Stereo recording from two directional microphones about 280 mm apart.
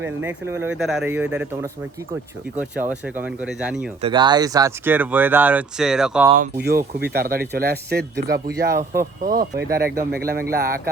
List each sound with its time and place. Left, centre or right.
0.3 s speech: centre
4.0 s speech: centre
6.3 s speech: right
8.7 s speech: centre
9.2 s speech: right